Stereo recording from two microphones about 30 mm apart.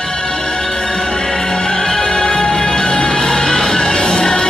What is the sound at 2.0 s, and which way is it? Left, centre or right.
Music, left.